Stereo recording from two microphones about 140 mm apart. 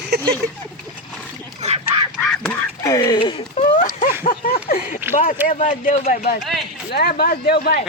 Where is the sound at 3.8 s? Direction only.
70° left (ahead or behind).